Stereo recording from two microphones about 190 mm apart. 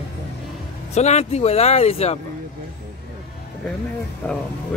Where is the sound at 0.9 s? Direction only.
35° left (ahead or behind).